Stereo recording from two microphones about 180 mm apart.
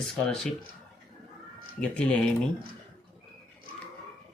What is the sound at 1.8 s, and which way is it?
Speech, 5° left (ahead or behind).